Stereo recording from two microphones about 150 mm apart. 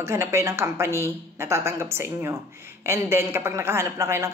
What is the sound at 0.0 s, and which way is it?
Speech, 20° right (ahead or behind).